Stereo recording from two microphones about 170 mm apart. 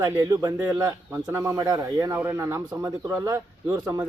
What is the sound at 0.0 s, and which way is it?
Speech, 20° right (ahead or behind).